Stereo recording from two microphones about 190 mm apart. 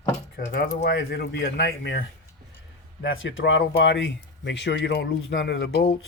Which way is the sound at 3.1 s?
90° left.